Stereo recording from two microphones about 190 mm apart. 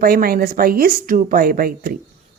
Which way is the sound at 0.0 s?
50° right (ahead or behind).